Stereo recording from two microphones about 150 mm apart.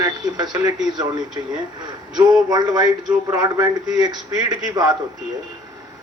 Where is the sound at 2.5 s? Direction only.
25° right (ahead or behind).